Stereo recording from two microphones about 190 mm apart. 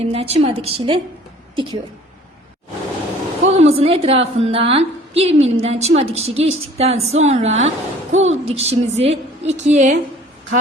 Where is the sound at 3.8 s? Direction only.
30° right (ahead or behind).